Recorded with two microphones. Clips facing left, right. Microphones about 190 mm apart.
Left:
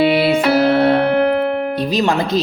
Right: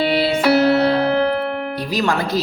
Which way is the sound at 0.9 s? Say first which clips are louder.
Left 3 dB; 55° left (ahead or behind).